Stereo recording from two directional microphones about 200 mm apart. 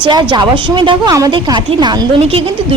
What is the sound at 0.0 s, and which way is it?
A woman's voice, 20° right (ahead or behind).